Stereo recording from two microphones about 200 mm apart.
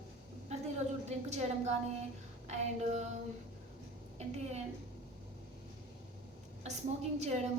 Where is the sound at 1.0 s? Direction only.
35° right (ahead or behind).